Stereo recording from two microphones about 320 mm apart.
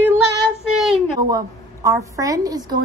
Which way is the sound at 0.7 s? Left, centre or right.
Centre.